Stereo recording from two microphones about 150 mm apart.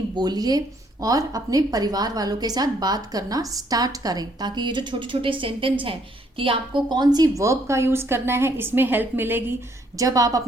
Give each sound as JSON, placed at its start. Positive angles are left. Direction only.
{"t": 0.2, "sound": "a woman's voice", "side_deg": -25}